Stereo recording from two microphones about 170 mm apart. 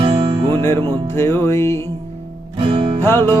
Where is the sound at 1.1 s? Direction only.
15° left (ahead or behind).